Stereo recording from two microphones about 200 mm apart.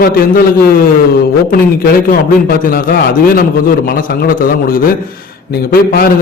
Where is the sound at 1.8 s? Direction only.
45° left (ahead or behind).